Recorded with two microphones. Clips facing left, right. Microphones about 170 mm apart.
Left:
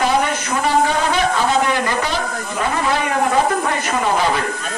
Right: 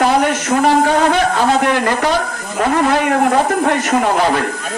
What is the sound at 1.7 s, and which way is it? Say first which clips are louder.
A woman's voice: right 5 dB; 55° right (ahead or behind).